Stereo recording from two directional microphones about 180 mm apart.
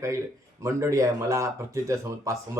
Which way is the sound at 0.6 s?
15° right (ahead or behind).